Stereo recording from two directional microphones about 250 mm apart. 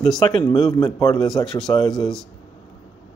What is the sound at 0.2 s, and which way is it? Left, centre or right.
Speech, centre.